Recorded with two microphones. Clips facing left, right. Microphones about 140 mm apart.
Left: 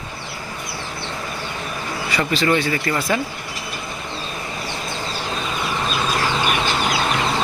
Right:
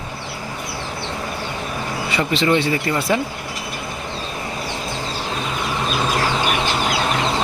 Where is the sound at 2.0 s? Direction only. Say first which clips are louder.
Right 1 dB; 25° right (ahead or behind).